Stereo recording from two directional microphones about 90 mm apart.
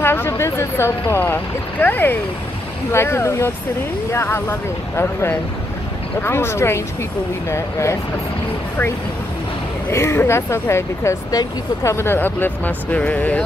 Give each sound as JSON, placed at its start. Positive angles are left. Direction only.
{"t": 0.0, "sound": "speech", "side_deg": 25}
{"t": 9.8, "sound": "speech", "side_deg": 30}